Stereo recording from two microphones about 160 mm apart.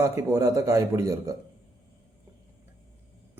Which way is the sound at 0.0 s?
15° right (ahead or behind).